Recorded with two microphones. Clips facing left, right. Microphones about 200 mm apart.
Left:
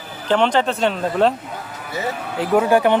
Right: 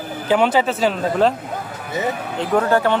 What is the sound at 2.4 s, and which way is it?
Speech, 10° left (ahead or behind).